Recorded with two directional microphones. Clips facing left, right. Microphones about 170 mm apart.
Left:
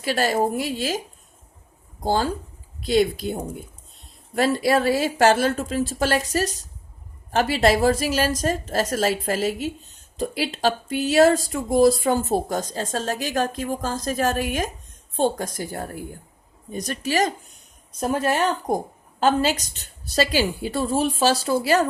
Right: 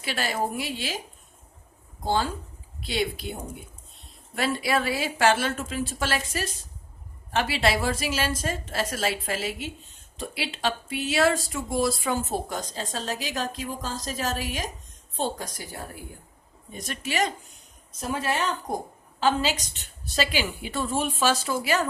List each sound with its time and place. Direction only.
0.0 s a woman's voice: 40° left (ahead or behind)
2.0 s a woman's voice: 40° left (ahead or behind)
4.4 s a woman's voice: 40° left (ahead or behind)
18.0 s a woman's voice: 50° left (ahead or behind)